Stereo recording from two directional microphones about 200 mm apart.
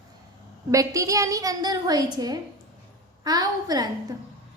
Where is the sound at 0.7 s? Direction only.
15° right (ahead or behind).